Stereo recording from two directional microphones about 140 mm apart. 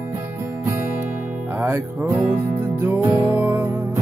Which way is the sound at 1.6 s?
15° right (ahead or behind).